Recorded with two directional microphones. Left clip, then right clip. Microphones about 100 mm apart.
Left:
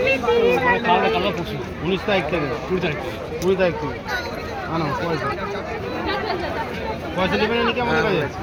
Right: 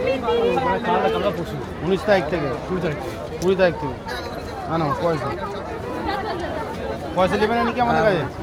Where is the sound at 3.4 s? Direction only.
35° right (ahead or behind).